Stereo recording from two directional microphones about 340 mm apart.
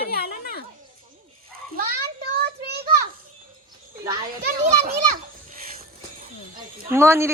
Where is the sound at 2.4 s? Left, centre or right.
Right.